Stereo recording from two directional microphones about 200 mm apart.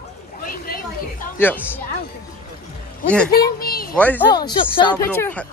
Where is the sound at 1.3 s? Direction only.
10° left (ahead or behind).